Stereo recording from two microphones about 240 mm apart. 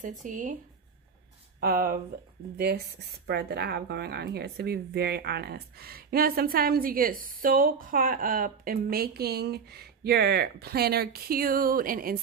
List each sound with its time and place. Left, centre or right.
0.0 s speech: right
1.6 s speech: right